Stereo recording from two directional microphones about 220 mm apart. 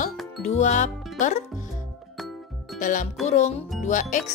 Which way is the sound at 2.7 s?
35° left (ahead or behind).